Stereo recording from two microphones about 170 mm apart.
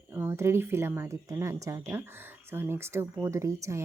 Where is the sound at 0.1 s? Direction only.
15° right (ahead or behind).